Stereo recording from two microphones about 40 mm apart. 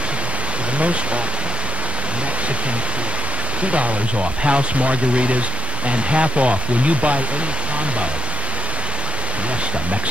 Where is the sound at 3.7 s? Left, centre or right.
Right.